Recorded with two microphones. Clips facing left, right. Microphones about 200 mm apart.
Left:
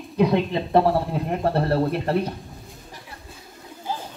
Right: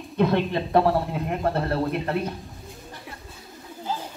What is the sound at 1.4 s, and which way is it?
Speech, 30° left (ahead or behind).